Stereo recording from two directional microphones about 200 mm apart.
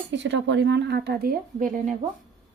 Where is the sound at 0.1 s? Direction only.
65° right (ahead or behind); by 2.0 s 40° right (ahead or behind).